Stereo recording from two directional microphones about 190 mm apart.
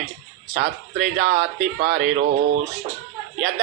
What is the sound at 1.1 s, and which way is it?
Speech, 70° right (ahead or behind).